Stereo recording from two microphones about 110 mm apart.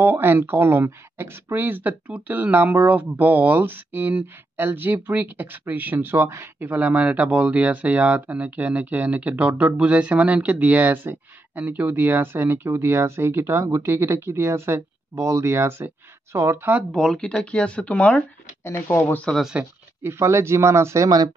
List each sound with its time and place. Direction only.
0.0 s speech: 20° right (ahead or behind)
16.9 s speech: 5° left (ahead or behind)
18.6 s speech: 20° left (ahead or behind)
19.2 s speech: centre (ahead or behind)
20.0 s speech: 25° right (ahead or behind)